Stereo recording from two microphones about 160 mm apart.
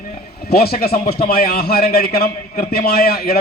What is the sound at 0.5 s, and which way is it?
A man's voice, 75° left (ahead or behind).